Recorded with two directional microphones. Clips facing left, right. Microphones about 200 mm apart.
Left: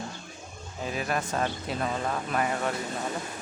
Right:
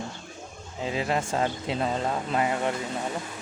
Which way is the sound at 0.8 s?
25° right (ahead or behind).